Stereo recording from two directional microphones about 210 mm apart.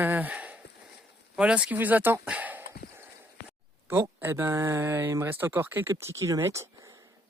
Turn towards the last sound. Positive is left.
turn(degrees=-15)  # may be behind; listen again after turning